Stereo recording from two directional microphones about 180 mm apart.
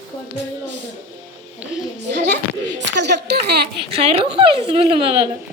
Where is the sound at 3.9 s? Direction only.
30° right (ahead or behind).